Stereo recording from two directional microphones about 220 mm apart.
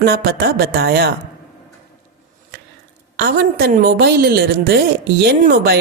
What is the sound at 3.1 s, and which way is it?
A woman's voice, 45° right (ahead or behind).